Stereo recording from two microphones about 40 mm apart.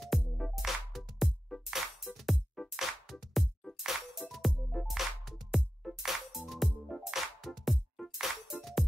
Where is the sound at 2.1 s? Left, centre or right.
Right.